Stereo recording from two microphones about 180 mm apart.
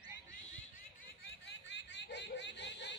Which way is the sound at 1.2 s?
80° left.